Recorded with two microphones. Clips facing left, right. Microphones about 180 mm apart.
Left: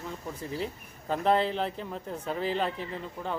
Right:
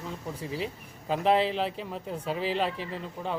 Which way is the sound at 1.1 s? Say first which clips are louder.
Right 1 dB; 5° right (ahead or behind).